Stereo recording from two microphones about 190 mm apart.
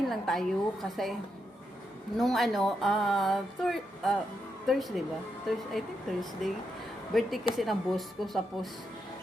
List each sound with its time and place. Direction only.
0.1 s speech: centre (ahead or behind)
2.1 s speech: centre (ahead or behind)